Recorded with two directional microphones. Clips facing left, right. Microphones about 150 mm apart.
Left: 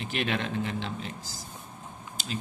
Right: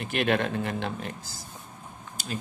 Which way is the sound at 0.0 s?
55° right (ahead or behind).